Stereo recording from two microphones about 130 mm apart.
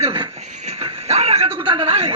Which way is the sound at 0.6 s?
55° right (ahead or behind).